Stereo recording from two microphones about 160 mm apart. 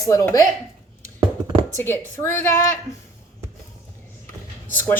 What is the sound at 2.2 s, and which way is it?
Speech, 15° left (ahead or behind).